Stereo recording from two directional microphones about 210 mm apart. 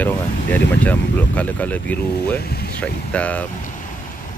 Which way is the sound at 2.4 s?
50° left (ahead or behind).